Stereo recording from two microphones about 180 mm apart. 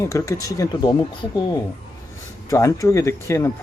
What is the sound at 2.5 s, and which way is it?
Speech, 15° left (ahead or behind).